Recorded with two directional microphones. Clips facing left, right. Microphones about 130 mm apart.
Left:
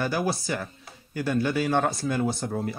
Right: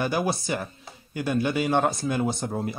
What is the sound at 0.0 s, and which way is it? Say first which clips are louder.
Speech: right 1 dB; 20° right (ahead or behind).